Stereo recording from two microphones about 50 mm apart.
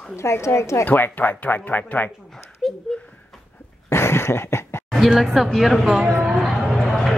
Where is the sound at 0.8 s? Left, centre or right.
Left.